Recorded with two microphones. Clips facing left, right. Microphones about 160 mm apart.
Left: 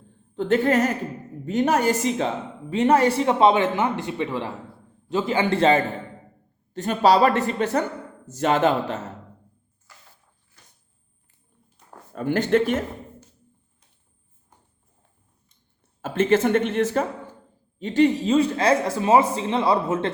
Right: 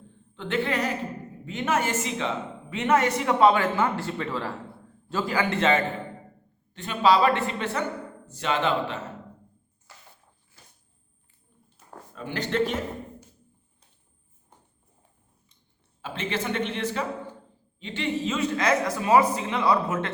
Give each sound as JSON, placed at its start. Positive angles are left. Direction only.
{"t": 0.3, "sound": "a woman's voice", "side_deg": 40}
{"t": 12.1, "sound": "a woman's voice", "side_deg": 50}
{"t": 16.0, "sound": "a woman's voice", "side_deg": 45}